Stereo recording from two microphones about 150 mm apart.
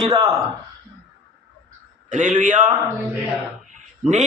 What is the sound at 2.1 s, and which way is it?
Speech, 55° right (ahead or behind).